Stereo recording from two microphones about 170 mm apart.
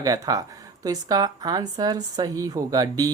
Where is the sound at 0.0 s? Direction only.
20° right (ahead or behind).